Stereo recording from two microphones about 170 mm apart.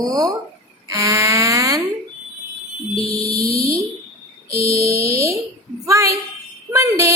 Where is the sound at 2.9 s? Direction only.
35° left (ahead or behind).